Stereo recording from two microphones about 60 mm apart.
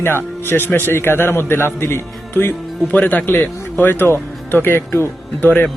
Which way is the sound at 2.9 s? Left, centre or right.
Left.